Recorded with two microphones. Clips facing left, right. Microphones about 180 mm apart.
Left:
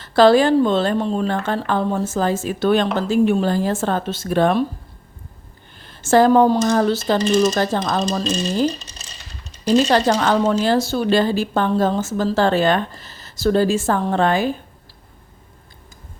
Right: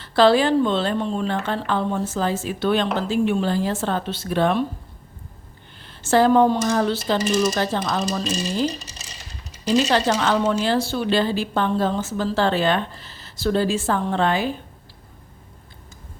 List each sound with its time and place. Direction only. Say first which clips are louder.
0.0 s speech: left 3 dB; 45° left (ahead or behind)
5.8 s speech: left 3 dB; 45° left (ahead or behind)
9.6 s speech: left 4 dB; 40° left (ahead or behind)